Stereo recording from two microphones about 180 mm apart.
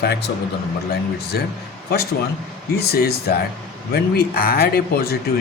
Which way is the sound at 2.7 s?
60° left (ahead or behind).